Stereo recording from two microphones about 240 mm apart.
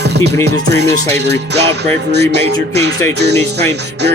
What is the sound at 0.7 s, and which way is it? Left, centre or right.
Music, right.